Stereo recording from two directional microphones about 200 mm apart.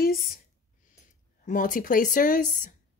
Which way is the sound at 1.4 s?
40° left (ahead or behind).